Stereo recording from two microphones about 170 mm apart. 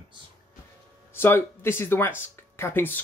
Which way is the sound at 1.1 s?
15° left (ahead or behind).